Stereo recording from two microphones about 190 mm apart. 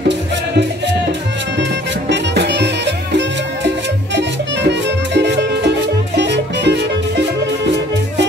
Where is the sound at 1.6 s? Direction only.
70° right (ahead or behind).